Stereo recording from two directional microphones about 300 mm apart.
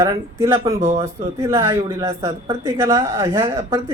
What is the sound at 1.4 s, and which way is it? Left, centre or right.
A woman's voice, centre.